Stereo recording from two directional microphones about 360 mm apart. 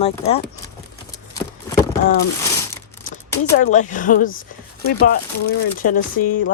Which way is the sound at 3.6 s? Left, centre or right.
Centre.